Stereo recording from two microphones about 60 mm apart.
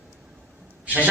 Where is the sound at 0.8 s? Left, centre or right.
Right.